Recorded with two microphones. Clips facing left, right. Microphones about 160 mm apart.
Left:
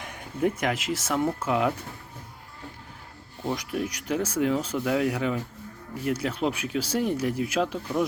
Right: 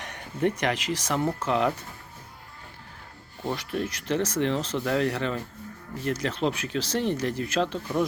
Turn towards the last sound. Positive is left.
turn(degrees=10)  # may be behind; listen again after turning